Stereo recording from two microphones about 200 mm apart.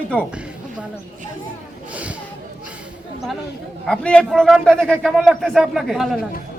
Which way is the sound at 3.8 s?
5° left (ahead or behind).